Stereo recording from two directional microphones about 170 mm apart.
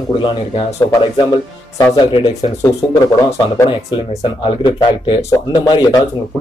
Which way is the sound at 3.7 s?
35° left (ahead or behind).